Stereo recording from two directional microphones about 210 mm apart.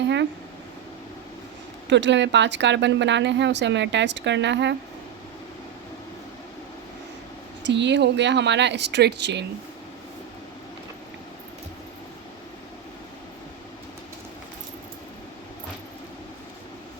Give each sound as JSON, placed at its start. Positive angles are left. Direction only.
{"t": 1.9, "sound": "speech", "side_deg": -60}
{"t": 7.6, "sound": "speech", "side_deg": -55}